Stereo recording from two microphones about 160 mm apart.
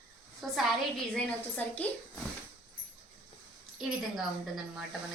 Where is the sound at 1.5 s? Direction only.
10° left (ahead or behind).